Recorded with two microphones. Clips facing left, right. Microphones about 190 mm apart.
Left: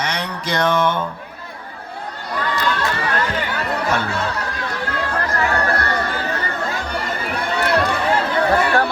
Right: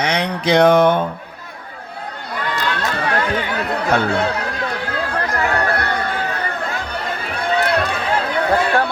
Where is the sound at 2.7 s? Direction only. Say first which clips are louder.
Right 1 dB; 60° right (ahead or behind).